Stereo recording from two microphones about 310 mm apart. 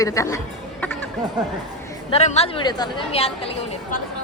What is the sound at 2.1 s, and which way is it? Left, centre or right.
A woman's voice, left.